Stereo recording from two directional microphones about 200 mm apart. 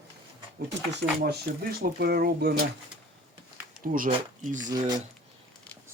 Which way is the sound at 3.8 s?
45° right (ahead or behind).